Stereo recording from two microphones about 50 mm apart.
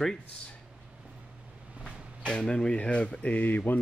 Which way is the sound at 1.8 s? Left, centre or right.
Centre.